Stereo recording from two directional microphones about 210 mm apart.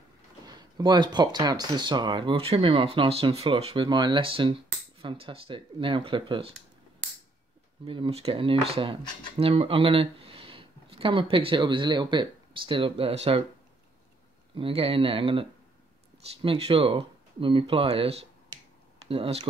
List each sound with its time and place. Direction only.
0.5 s speech: 20° right (ahead or behind)
7.8 s speech: 25° right (ahead or behind)
14.5 s speech: 25° right (ahead or behind)
16.4 s speech: 25° right (ahead or behind)